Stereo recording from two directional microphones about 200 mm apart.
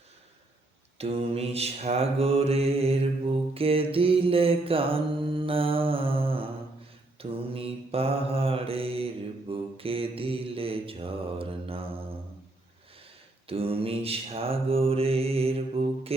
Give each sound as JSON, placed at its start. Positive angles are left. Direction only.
{"t": 0.9, "sound": "mantra", "side_deg": -30}
{"t": 13.5, "sound": "mantra", "side_deg": -30}